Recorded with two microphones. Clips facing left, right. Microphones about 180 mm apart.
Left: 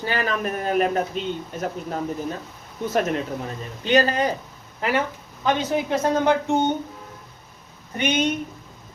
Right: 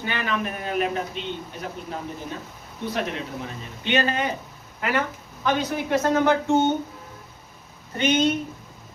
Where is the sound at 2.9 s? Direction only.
45° left (ahead or behind).